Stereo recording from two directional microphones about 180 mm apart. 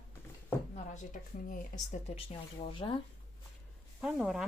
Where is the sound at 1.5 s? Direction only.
45° left (ahead or behind); by 3.0 s 25° left (ahead or behind).